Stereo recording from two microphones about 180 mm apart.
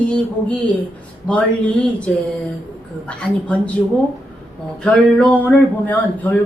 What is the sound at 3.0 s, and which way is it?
Speech, 5° left (ahead or behind).